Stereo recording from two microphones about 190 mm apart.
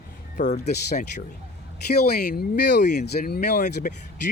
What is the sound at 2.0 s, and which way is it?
Speech, 55° left (ahead or behind).